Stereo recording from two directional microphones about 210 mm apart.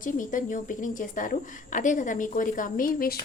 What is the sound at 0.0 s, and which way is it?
A woman's voice, 40° left (ahead or behind).